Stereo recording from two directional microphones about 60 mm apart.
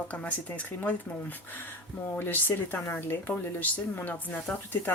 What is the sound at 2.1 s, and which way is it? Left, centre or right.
Speech, left.